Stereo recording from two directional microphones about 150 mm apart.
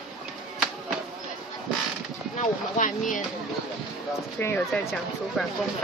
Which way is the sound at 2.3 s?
55° left (ahead or behind).